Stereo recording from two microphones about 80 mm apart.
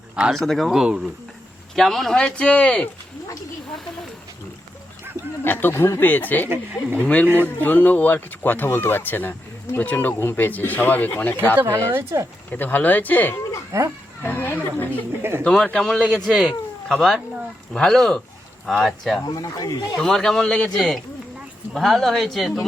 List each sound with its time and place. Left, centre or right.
0.3 s a man's voice: centre
1.7 s speech: centre
5.4 s speech: left
7.3 s speech: right
7.6 s speech: left
11.5 s speech: right
12.5 s speech: left
13.7 s speech: right
14.2 s speech: left
15.2 s speech: right
15.4 s a man's voice: centre
19.2 s speech: left
20.0 s a man's voice: centre